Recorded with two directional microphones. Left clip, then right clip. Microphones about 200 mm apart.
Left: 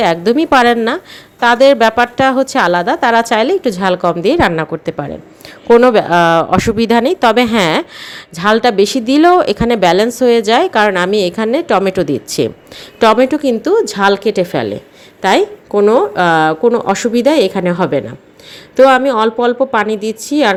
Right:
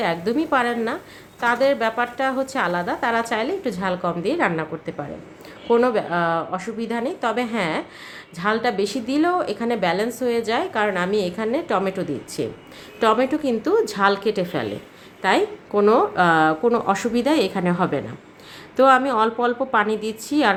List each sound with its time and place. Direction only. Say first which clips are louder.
0.0 s speech: left 10 dB; 40° left (ahead or behind)